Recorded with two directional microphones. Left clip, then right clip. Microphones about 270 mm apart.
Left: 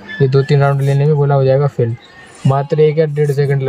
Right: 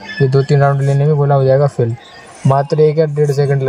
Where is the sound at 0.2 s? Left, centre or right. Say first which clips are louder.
Even; centre.